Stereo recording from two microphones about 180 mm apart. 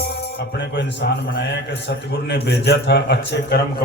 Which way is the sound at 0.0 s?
65° left (ahead or behind).